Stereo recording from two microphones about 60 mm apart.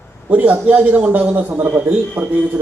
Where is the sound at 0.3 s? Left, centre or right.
Right.